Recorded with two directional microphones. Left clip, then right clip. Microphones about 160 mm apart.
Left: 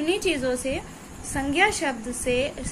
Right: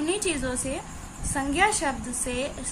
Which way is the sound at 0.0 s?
5° left (ahead or behind).